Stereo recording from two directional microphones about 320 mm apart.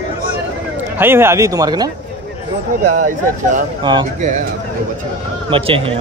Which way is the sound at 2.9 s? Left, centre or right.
Right.